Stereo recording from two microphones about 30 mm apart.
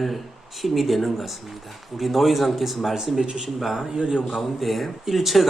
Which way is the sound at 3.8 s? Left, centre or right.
Centre.